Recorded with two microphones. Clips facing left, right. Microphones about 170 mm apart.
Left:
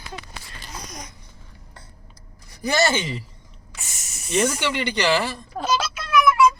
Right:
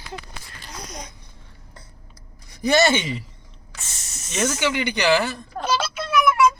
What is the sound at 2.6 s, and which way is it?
Speech, 20° right (ahead or behind).